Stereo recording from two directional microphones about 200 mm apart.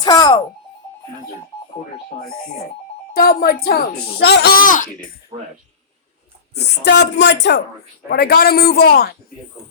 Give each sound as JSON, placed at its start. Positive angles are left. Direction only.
{"t": 0.0, "sound": "speech", "side_deg": 20}
{"t": 3.1, "sound": "speech", "side_deg": 50}
{"t": 6.6, "sound": "speech", "side_deg": 55}